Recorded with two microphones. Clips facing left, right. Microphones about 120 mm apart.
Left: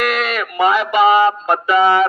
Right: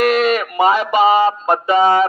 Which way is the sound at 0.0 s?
35° right (ahead or behind).